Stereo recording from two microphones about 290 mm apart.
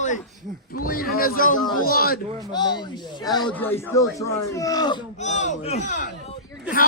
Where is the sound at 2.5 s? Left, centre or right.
Centre.